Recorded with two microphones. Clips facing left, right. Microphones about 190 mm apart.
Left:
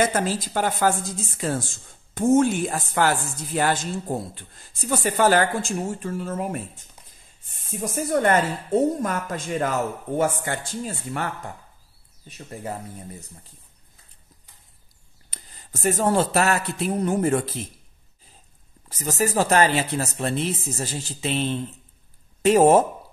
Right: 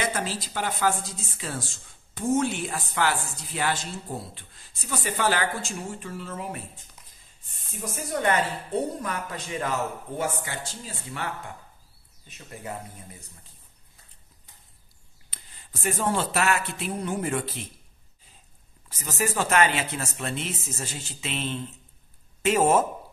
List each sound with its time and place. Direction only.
0.0 s a woman's voice: 45° left (ahead or behind)
7.8 s a woman's voice: 50° left (ahead or behind)
12.3 s speech: 35° left (ahead or behind)
15.2 s speech: 40° left (ahead or behind)
18.9 s speech: 40° left (ahead or behind)